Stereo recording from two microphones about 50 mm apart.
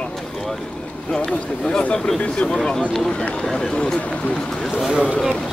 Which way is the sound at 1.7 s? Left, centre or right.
Left.